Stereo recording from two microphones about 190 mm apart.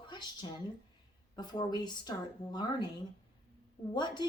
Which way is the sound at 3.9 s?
25° left (ahead or behind).